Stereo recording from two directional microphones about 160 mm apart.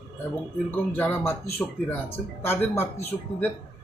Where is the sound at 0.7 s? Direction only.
10° left (ahead or behind).